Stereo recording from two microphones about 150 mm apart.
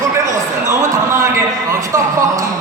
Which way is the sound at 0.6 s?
20° right (ahead or behind).